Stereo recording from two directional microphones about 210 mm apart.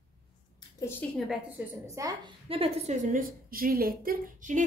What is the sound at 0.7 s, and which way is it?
Speech, 10° left (ahead or behind).